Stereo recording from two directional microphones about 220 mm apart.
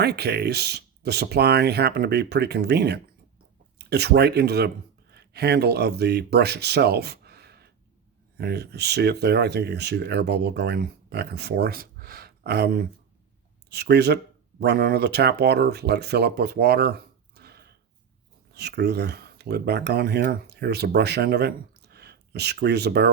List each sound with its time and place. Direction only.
0.0 s speech: 50° right (ahead or behind)
17.3 s a sound: 50° right (ahead or behind)
18.5 s speech: 50° right (ahead or behind)